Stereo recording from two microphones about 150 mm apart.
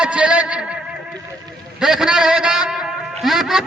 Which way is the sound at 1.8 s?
5° right (ahead or behind).